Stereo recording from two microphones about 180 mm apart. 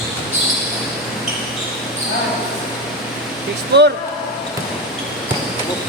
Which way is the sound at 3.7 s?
70° right (ahead or behind).